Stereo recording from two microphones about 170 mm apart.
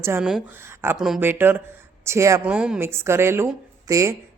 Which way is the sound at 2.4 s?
5° right (ahead or behind).